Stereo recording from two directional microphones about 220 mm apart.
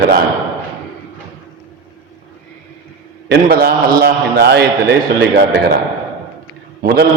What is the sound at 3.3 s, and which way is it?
A man's voice, 45° right (ahead or behind).